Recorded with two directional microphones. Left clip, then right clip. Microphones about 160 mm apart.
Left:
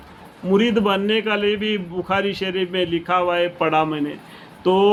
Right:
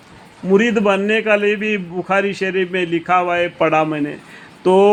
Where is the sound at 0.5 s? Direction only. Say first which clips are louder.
Right 4 dB; 40° right (ahead or behind).